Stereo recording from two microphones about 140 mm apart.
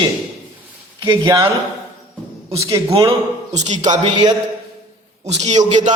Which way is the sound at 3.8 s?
30° right (ahead or behind).